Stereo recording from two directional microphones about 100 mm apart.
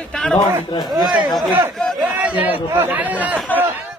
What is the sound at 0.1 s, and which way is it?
Speech, 5° left (ahead or behind).